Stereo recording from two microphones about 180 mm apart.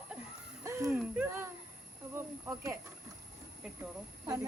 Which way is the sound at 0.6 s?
15° right (ahead or behind).